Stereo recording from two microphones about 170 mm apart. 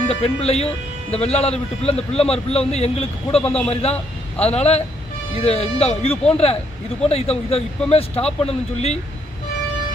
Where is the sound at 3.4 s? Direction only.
5° left (ahead or behind).